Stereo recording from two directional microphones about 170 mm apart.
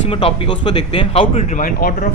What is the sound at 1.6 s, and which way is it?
Speech, 50° left (ahead or behind).